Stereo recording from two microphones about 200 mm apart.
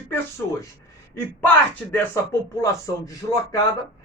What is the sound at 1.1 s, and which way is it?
Speech, 10° left (ahead or behind).